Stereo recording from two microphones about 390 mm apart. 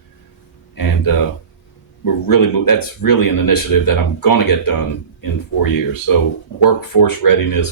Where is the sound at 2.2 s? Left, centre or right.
Left.